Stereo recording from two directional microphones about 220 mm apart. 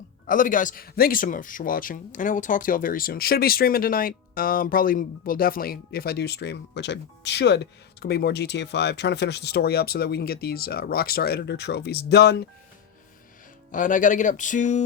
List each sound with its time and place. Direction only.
0.3 s speech: 35° left (ahead or behind)
13.7 s speech: 35° left (ahead or behind)